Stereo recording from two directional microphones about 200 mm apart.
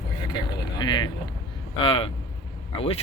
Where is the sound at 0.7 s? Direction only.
20° left (ahead or behind).